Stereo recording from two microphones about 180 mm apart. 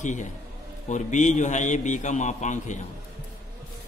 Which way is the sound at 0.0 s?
40° left (ahead or behind).